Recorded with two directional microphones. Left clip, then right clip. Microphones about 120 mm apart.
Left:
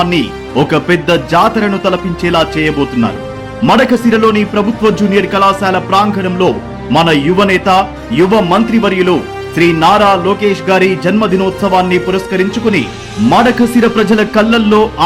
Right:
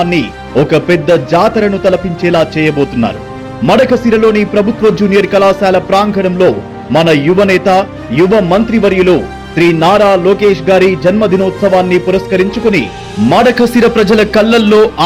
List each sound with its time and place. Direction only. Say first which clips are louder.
0.0 s a man's voice: even; 5° right (ahead or behind); by 15.0 s 20° right (ahead or behind)